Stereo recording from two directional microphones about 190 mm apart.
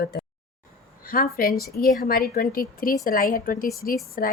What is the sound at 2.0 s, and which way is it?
Speech, 50° left (ahead or behind).